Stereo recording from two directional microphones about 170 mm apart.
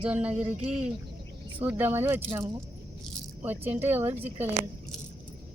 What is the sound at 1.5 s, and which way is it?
Speech, 10° right (ahead or behind).